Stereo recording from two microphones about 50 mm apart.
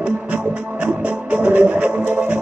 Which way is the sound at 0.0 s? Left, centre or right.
Right.